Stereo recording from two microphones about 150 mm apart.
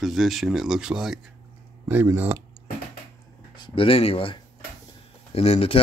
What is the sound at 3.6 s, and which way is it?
Speech, 40° left (ahead or behind).